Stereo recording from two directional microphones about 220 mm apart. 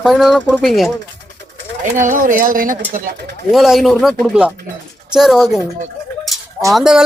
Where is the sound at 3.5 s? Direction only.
Centre (ahead or behind).